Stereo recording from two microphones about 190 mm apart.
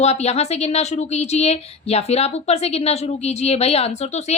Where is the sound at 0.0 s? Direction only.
35° left (ahead or behind).